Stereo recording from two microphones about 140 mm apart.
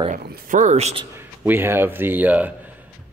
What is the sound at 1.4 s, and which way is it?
Speech, 15° right (ahead or behind).